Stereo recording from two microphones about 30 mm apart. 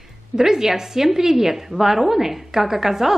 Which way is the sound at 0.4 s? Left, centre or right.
Centre.